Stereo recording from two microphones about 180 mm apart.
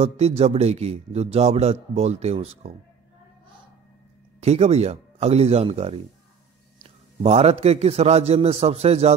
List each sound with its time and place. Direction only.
0.4 s a man's voice: 35° right (ahead or behind)
4.4 s a man's voice: 35° right (ahead or behind)